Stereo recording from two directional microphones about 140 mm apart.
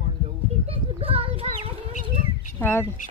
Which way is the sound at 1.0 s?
40° right (ahead or behind).